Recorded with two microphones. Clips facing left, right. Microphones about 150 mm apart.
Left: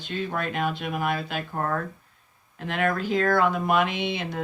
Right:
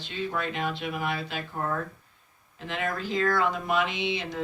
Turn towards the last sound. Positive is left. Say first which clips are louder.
# left 2 dB
turn(degrees=55)  # may be behind; listen again after turning